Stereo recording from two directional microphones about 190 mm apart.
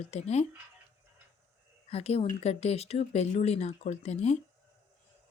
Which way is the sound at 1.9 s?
35° left (ahead or behind).